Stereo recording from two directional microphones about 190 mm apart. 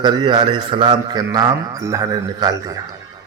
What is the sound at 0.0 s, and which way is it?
Speech, 25° right (ahead or behind).